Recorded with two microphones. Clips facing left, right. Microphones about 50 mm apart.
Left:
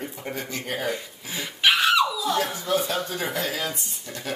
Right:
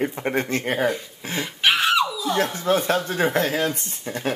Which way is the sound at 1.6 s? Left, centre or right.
Centre.